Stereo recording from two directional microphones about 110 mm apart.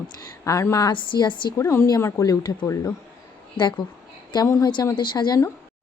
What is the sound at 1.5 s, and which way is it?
Speech, 30° left (ahead or behind).